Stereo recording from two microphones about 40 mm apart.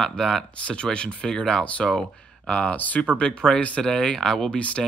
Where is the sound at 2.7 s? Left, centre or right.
Left.